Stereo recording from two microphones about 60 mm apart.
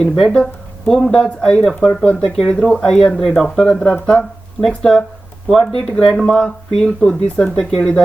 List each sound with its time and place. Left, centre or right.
0.0 s speech: centre
3.6 s speech: centre
4.6 s speech: centre